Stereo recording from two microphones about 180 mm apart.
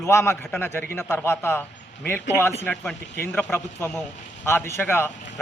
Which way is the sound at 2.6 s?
10° left (ahead or behind).